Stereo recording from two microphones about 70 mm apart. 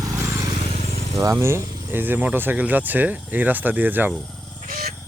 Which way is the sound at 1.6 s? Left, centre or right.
Right.